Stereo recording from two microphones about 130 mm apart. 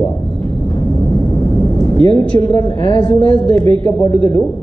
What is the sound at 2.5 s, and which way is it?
Speech, 35° left (ahead or behind).